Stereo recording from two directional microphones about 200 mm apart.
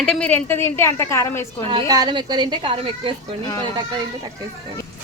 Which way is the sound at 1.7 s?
20° right (ahead or behind).